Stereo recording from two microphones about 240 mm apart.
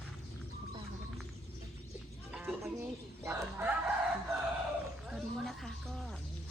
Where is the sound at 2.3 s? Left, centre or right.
Centre.